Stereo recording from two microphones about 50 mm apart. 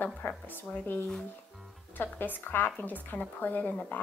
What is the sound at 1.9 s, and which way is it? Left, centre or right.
A woman's voice, left.